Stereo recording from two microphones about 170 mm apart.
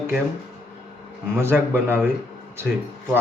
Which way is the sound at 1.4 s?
15° right (ahead or behind).